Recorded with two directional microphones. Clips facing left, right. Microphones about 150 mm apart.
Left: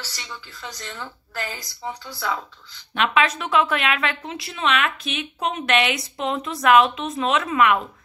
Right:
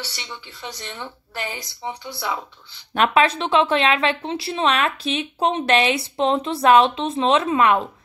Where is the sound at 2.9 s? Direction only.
40° right (ahead or behind).